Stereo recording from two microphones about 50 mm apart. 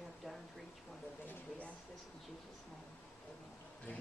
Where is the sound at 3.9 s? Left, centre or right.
Left.